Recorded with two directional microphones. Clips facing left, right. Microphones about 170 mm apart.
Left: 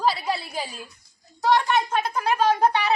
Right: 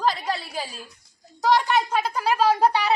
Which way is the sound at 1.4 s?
10° right (ahead or behind).